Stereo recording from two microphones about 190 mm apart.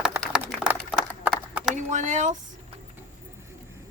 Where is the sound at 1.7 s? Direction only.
40° right (ahead or behind).